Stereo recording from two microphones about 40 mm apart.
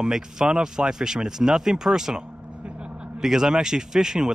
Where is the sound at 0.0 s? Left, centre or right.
Centre.